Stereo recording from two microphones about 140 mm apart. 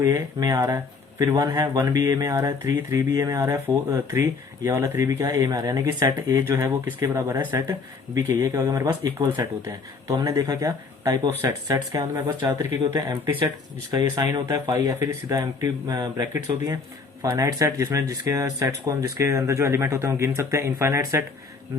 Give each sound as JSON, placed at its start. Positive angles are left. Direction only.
{"t": 0.0, "sound": "speech", "side_deg": -25}